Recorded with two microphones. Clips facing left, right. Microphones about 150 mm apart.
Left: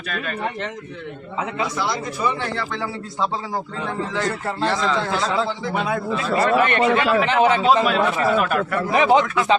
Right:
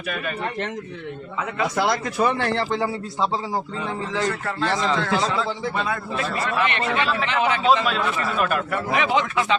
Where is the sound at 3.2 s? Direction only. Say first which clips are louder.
Even; 10° right (ahead or behind).